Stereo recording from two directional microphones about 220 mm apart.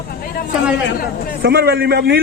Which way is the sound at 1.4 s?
45° right (ahead or behind).